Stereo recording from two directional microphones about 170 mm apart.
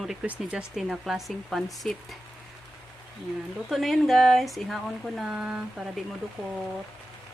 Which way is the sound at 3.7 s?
Centre (ahead or behind).